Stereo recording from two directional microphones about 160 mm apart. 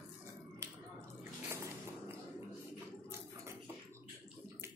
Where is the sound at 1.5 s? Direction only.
15° right (ahead or behind).